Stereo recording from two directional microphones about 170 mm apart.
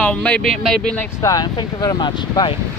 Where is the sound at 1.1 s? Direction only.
20° left (ahead or behind).